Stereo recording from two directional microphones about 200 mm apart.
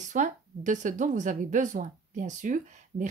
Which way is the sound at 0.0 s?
40° right (ahead or behind).